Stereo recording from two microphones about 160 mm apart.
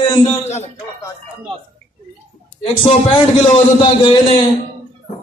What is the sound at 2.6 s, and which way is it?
A man's voice, 40° left (ahead or behind).